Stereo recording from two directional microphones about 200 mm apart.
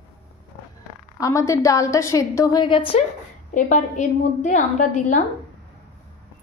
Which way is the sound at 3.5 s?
40° left (ahead or behind).